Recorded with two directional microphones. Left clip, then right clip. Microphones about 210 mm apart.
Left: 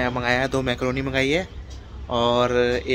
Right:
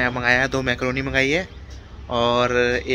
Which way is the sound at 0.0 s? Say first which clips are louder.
Right 3 dB; 5° left (ahead or behind).